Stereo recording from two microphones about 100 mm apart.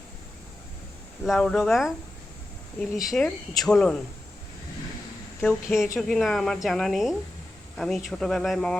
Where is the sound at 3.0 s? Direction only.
Centre (ahead or behind).